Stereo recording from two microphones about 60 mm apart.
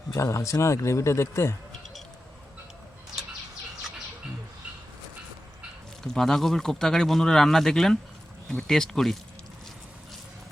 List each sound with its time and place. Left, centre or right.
0.1 s a man's voice: left
6.0 s speech: centre